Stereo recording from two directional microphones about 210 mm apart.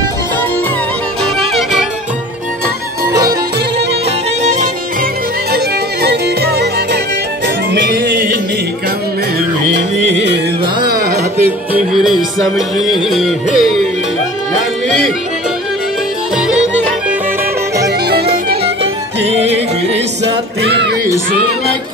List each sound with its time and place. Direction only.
1.2 s music: centre (ahead or behind)
4.4 s music: 35° right (ahead or behind)
6.0 s music: 50° right (ahead or behind)
10.1 s carnatic music: 55° right (ahead or behind)
11.4 s music: 5° right (ahead or behind)
16.3 s music: 5° right (ahead or behind)
17.8 s music: 50° right (ahead or behind)
19.4 s music: 30° right (ahead or behind)
20.6 s a sound: 55° right (ahead or behind)